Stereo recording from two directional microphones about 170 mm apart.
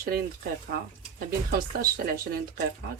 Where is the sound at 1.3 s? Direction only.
60° right (ahead or behind).